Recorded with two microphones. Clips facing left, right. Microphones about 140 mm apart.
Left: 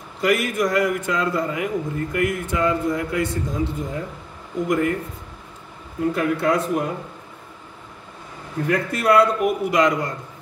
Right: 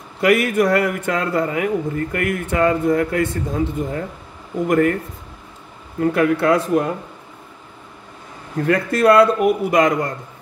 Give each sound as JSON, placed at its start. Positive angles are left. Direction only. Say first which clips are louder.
{"t": 0.2, "sound": "speech", "louder": "right 5 dB", "side_deg": -60}
{"t": 6.1, "sound": "speech", "louder": "right 5 dB", "side_deg": -65}
{"t": 8.6, "sound": "a man's voice", "louder": "right 5 dB", "side_deg": -70}